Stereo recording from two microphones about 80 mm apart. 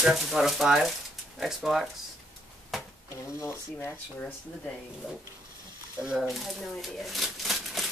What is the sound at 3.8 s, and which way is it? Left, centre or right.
Speech, left.